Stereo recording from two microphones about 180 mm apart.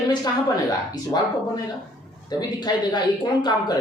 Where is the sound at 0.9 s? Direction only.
20° left (ahead or behind).